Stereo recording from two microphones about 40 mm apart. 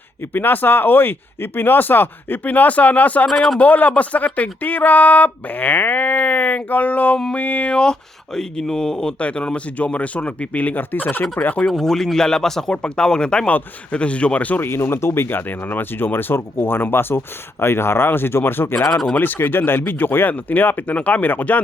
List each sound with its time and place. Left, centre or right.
0.3 s speech: left
3.2 s a man's voice: centre
3.6 s speech: left
7.8 s speech: centre
9.1 s speech: left
11.8 s a man's voice: centre
12.7 s speech: left
14.6 s speech: left
19.1 s speech: left
20.9 s speech: left